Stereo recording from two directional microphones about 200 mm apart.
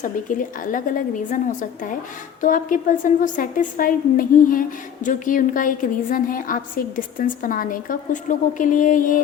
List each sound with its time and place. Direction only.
0.0 s a woman's voice: 40° left (ahead or behind)
2.4 s a woman's voice: 40° left (ahead or behind)